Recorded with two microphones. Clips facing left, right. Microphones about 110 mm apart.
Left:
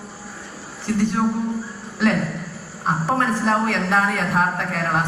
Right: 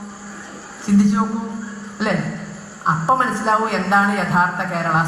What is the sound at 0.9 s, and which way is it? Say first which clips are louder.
A man's voice: right 4 dB; 20° right (ahead or behind).